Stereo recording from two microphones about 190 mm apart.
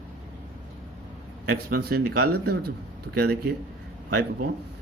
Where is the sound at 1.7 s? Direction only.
55° right (ahead or behind).